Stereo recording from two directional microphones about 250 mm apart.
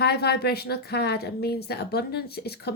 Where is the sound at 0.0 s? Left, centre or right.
Left.